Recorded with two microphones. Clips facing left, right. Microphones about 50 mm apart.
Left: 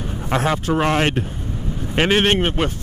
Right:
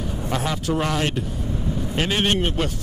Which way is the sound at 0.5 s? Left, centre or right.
Left.